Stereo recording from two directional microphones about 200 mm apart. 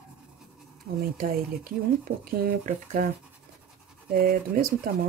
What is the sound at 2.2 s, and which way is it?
Speech, 45° right (ahead or behind).